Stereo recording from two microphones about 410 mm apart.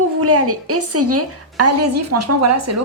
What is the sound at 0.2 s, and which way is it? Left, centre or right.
A woman's voice, right.